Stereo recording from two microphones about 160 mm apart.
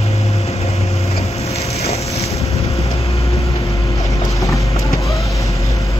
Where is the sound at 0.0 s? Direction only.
40° left (ahead or behind).